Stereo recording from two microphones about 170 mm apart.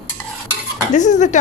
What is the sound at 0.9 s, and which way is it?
Speech, 45° left (ahead or behind).